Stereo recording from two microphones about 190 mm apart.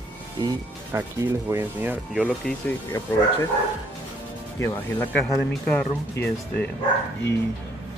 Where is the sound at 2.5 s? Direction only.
5° left (ahead or behind).